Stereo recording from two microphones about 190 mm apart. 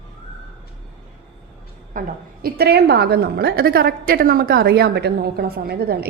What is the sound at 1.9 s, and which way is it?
Speech, 45° right (ahead or behind).